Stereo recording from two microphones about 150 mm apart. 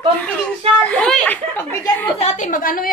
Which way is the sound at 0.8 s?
5° left (ahead or behind).